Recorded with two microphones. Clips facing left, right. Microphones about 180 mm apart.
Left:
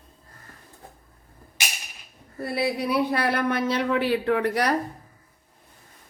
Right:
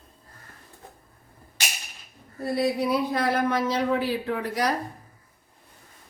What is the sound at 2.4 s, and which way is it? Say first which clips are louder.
Speech: right 2 dB; 65° left (ahead or behind).